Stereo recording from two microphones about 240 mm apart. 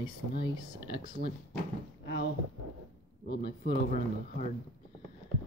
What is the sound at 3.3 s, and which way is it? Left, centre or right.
Speech, left.